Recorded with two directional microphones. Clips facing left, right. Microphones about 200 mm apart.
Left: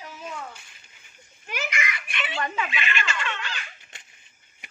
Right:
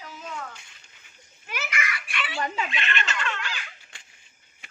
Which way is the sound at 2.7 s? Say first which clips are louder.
Left 1 dB; centre (ahead or behind).